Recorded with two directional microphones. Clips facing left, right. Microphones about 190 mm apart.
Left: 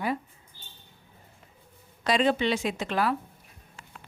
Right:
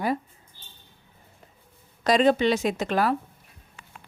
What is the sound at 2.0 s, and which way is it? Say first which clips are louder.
Speech: right 4 dB; 40° right (ahead or behind).